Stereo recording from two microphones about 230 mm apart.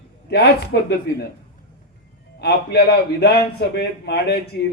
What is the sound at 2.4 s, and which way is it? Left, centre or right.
A man's voice, left.